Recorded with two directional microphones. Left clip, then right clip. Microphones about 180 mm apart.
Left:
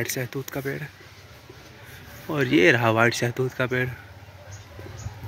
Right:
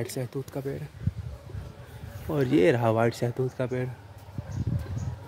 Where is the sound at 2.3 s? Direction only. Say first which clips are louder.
Left 4 dB; 15° right (ahead or behind).